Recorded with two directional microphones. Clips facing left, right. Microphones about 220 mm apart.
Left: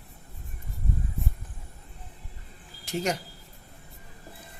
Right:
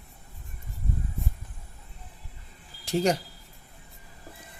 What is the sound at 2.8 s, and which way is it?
Speech, 30° right (ahead or behind).